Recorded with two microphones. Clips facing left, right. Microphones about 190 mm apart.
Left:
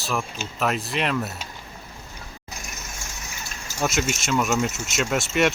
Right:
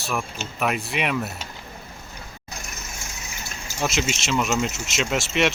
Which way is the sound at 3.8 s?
Centre (ahead or behind).